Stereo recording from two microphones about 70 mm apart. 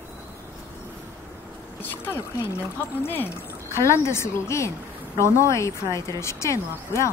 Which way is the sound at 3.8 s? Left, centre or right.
Left.